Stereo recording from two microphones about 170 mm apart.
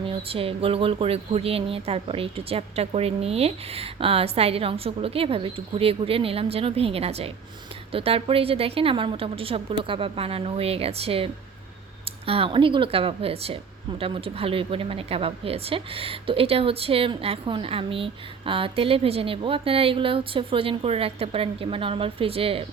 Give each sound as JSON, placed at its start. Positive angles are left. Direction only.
{"t": 0.0, "sound": "speech", "side_deg": -35}